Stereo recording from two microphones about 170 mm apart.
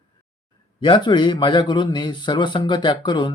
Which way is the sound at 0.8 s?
30° left (ahead or behind).